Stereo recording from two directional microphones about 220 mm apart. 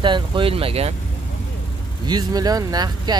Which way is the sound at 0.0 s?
20° right (ahead or behind).